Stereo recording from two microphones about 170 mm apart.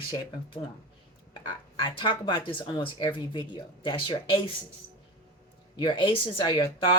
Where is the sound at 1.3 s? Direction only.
25° left (ahead or behind).